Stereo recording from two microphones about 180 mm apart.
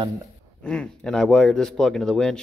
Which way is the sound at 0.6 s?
5° left (ahead or behind).